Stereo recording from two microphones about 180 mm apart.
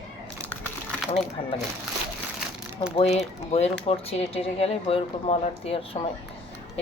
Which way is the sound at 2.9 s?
35° left (ahead or behind).